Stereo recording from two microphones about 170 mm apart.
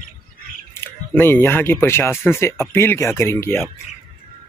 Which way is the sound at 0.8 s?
10° left (ahead or behind).